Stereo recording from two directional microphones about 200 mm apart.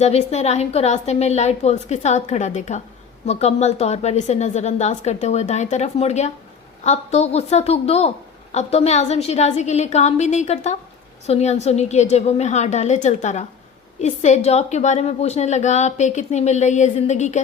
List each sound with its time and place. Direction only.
0.0 s a woman's voice: 30° left (ahead or behind)